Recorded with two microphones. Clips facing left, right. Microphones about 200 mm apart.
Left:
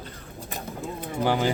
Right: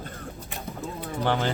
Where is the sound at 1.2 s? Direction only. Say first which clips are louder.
Left 2 dB; 10° left (ahead or behind).